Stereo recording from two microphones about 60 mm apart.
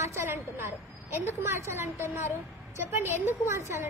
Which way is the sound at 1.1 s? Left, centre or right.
Right.